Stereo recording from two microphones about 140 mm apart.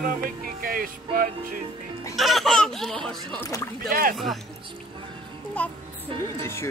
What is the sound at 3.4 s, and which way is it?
Speech, 25° left (ahead or behind).